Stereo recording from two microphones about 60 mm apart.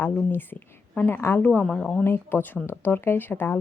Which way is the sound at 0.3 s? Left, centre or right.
Left.